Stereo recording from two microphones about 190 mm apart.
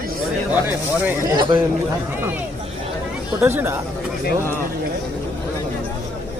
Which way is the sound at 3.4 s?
10° right (ahead or behind).